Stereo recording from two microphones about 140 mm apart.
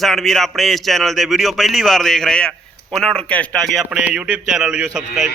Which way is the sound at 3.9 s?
5° right (ahead or behind).